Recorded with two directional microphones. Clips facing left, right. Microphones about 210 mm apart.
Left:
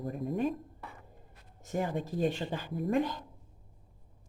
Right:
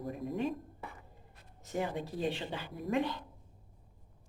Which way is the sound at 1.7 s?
45° left (ahead or behind).